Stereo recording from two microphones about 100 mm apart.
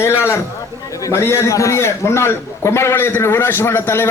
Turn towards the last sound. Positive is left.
turn(degrees=25)  # may be behind; listen again after turning